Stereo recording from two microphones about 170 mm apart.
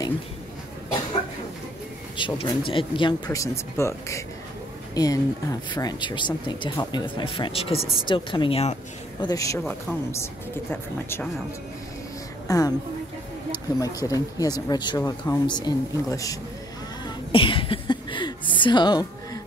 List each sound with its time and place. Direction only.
2.1 s speech: 30° left (ahead or behind)
9.2 s speech: 20° left (ahead or behind)
12.4 s a woman's voice: 20° left (ahead or behind)
13.7 s speech: 20° left (ahead or behind)
17.0 s a sound: 30° left (ahead or behind)